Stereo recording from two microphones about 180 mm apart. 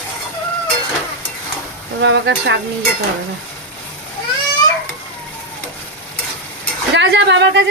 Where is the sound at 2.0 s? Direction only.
85° right.